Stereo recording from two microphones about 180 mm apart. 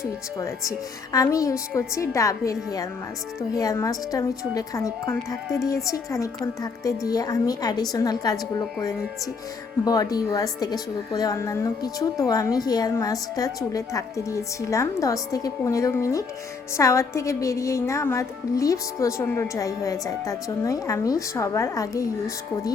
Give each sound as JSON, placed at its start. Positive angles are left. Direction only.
{"t": 0.0, "sound": "a woman's voice", "side_deg": 15}
{"t": 3.6, "sound": "a woman's voice", "side_deg": 20}
{"t": 9.8, "sound": "a woman's voice", "side_deg": 20}